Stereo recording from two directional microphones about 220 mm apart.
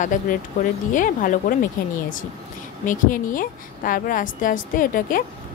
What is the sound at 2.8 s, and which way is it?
A woman's voice, 35° left (ahead or behind).